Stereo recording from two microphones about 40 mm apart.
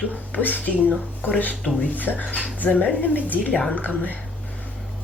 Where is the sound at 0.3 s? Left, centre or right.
Left.